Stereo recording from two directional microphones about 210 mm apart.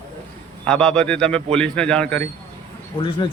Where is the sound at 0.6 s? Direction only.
5° left (ahead or behind).